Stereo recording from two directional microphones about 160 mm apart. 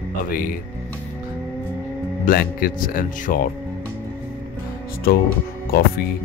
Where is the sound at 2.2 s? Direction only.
65° left (ahead or behind).